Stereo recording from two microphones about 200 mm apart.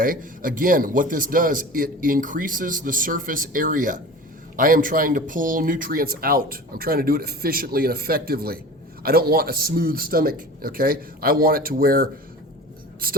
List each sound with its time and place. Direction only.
0.0 s speech: 45° right (ahead or behind)